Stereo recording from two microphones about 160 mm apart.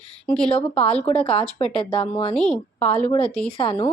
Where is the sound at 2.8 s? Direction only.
40° left (ahead or behind).